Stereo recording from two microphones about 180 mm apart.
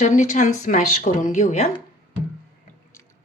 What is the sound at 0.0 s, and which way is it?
Speech, 40° left (ahead or behind).